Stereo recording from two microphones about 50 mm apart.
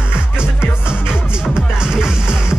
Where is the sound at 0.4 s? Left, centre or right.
Centre.